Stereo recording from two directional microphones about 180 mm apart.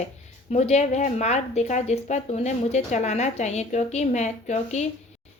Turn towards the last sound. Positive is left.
turn(degrees=40)  # may be behind; listen again after turning